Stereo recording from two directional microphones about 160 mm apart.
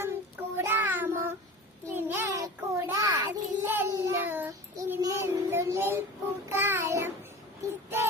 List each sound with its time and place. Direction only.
0.0 s child singing: 15° right (ahead or behind)
3.7 s child singing: 10° right (ahead or behind)